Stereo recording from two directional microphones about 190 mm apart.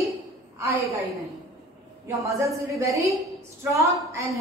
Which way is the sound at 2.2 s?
15° right (ahead or behind).